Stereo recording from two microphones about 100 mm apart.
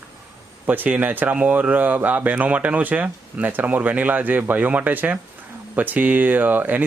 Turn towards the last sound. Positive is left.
turn(degrees=-15)  # may be behind; listen again after turning